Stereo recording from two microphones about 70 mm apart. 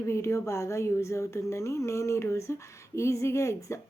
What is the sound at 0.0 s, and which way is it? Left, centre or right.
Speech, left.